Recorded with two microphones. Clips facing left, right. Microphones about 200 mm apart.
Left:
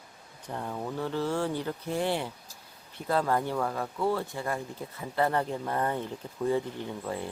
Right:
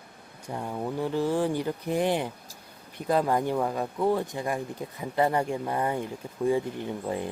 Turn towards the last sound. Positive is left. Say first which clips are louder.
# right 4 dB
turn(degrees=-15)  # may be behind; listen again after turning